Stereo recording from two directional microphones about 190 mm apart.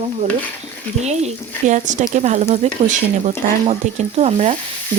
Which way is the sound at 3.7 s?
35° right (ahead or behind).